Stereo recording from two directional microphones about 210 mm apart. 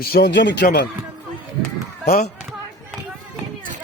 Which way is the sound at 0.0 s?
50° left (ahead or behind).